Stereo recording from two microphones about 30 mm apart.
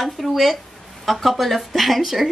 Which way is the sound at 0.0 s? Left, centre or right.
Centre.